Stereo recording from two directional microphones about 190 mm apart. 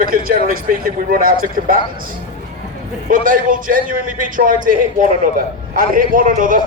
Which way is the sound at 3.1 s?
45° right (ahead or behind).